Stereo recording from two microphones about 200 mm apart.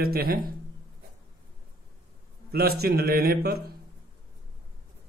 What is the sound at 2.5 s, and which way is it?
A man's voice, 50° right (ahead or behind).